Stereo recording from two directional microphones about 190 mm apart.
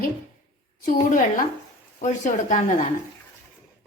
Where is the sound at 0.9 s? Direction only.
40° left (ahead or behind).